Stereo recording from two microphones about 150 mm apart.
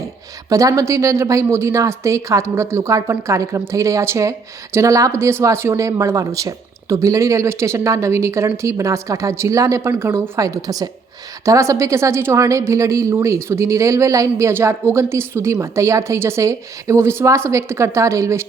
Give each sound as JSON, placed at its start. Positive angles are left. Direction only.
{"t": 0.5, "sound": "a woman's voice", "side_deg": -20}